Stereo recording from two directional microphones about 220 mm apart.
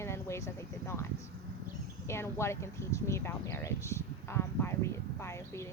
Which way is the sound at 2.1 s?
10° left (ahead or behind).